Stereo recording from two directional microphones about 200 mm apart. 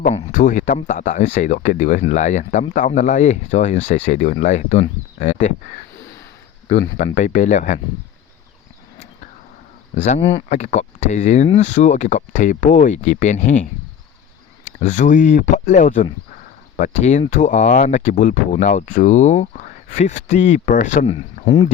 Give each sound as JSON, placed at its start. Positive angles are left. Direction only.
{"t": 0.1, "sound": "speech", "side_deg": 40}
{"t": 6.9, "sound": "speech", "side_deg": 35}
{"t": 9.9, "sound": "speech", "side_deg": 35}